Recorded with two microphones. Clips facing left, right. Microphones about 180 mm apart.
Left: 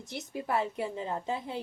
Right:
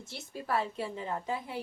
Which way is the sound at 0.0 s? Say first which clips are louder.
Left 4 dB; 15° left (ahead or behind).